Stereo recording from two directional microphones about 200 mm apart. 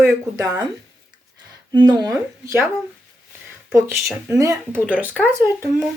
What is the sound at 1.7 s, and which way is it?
Speech, 20° right (ahead or behind).